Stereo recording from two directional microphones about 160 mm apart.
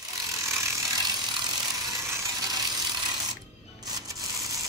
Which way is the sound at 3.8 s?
25° right (ahead or behind).